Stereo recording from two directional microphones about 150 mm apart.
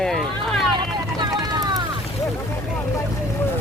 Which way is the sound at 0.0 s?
5° left (ahead or behind).